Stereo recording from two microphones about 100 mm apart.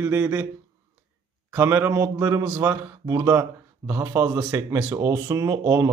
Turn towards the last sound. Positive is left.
turn(degrees=-30)  # may be behind; listen again after turning